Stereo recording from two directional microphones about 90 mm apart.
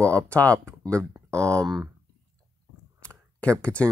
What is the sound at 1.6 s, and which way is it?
Speech, 45° right (ahead or behind).